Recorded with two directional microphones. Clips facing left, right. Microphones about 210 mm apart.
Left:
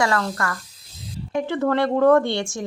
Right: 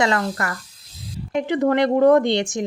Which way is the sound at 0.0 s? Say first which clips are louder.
Right 1 dB; 20° right (ahead or behind).